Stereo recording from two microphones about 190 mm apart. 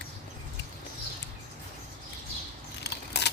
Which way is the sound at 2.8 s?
65° left (ahead or behind).